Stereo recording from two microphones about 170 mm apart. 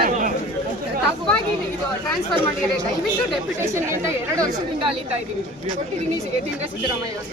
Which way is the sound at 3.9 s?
20° right (ahead or behind).